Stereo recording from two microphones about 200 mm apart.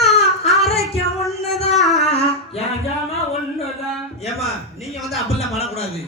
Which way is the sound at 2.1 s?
30° left (ahead or behind).